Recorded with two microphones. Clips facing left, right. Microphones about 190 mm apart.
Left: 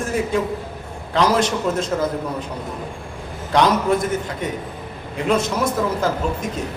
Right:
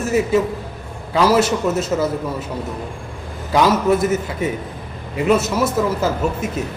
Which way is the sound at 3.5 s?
5° right (ahead or behind).